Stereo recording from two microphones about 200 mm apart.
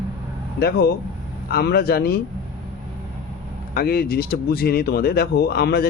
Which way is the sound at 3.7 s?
50° left (ahead or behind).